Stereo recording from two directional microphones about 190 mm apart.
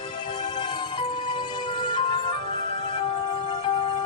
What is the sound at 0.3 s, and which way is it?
Music, 25° left (ahead or behind).